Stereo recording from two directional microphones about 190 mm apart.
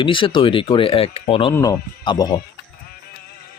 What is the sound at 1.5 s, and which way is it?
Speech, 15° left (ahead or behind).